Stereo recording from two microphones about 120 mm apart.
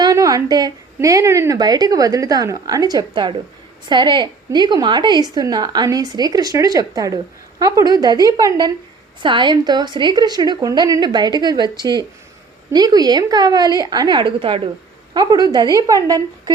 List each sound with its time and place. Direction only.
0.0 s a sound: 30° right (ahead or behind)
0.9 s a woman's voice: 25° right (ahead or behind); by 14.6 s 45° right (ahead or behind)
15.1 s a woman's voice: 35° right (ahead or behind)